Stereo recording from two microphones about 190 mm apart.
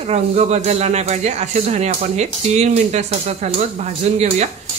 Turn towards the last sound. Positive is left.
turn(degrees=-35)  # may be behind; listen again after turning